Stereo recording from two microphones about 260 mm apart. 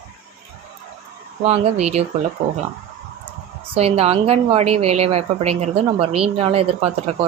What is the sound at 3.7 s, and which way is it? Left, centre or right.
A woman's voice, right.